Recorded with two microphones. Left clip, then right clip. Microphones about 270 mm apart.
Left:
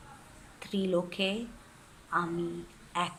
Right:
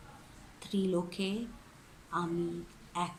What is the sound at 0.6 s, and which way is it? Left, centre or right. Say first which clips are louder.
Speech: left 3 dB; centre.